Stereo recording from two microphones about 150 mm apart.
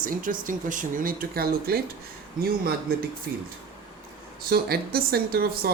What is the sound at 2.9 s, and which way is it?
Speech, 85° right.